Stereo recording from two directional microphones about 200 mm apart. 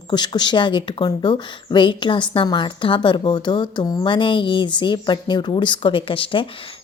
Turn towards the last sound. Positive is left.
turn(degrees=25)  # may be behind; listen again after turning